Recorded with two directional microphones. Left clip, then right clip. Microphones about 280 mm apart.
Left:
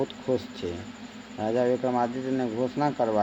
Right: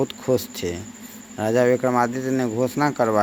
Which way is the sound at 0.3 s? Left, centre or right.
Right.